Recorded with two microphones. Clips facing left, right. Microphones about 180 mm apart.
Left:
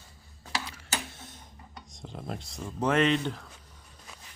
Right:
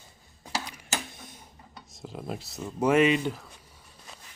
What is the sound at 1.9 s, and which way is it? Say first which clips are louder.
Speech: right 2 dB; 5° right (ahead or behind).